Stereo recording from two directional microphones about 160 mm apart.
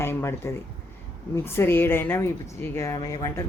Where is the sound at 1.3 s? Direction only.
15° left (ahead or behind).